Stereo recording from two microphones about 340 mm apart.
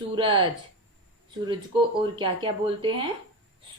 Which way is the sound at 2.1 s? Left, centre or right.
Centre.